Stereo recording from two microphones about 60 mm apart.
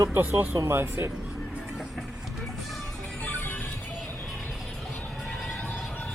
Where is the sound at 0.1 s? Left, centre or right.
Right.